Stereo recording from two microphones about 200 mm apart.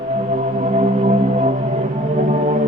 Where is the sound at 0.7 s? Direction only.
35° right (ahead or behind).